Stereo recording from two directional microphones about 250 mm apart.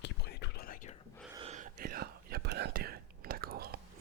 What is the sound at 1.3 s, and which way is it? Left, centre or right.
Whispering, right.